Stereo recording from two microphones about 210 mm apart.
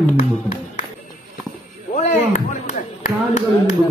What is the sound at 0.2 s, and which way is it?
Speech, 35° left (ahead or behind).